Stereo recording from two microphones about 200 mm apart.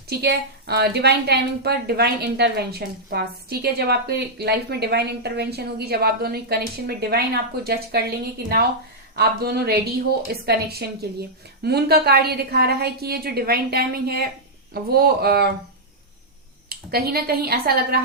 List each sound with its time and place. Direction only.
0.1 s a woman's voice: 55° right (ahead or behind)
16.6 s a woman's voice: 50° right (ahead or behind)